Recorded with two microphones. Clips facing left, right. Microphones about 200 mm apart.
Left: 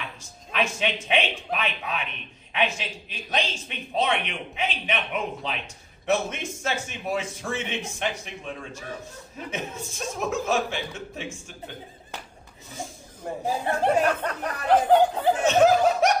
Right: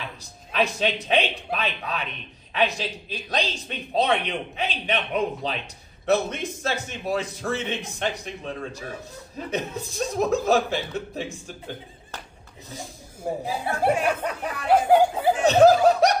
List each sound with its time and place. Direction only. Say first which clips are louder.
0.2 s a man's voice: right 3 dB; 35° right (ahead or behind)
9.5 s a man's voice: right 4 dB; 35° right (ahead or behind)
13.2 s speech: even; 10° right (ahead or behind)
15.4 s snicker: right 4 dB; 35° right (ahead or behind)